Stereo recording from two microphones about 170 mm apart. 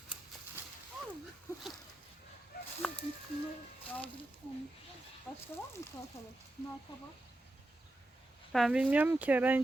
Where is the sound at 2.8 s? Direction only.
Centre (ahead or behind).